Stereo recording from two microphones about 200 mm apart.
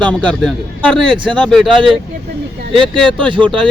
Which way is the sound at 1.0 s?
25° right (ahead or behind).